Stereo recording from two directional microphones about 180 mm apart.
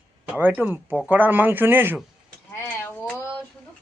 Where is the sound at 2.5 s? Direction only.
10° left (ahead or behind).